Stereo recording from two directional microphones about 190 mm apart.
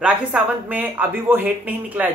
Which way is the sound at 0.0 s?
5° right (ahead or behind).